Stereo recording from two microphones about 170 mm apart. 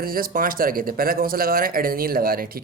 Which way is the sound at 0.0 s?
60° right (ahead or behind).